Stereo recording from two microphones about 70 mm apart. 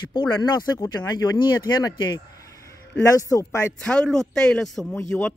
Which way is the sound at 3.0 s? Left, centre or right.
Left.